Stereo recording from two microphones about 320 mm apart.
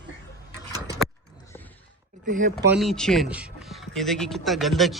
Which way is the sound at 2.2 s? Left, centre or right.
Right.